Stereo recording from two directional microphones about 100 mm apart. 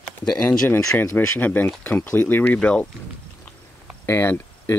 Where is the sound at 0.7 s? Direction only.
20° left (ahead or behind).